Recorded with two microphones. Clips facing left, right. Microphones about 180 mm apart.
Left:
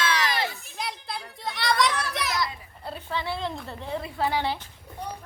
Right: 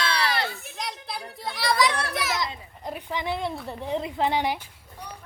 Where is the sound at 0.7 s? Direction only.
Centre (ahead or behind).